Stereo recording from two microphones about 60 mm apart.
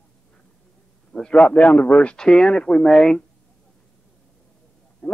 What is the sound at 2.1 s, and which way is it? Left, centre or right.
Speech, centre.